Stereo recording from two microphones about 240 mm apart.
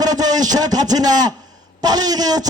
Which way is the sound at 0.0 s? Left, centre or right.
Centre.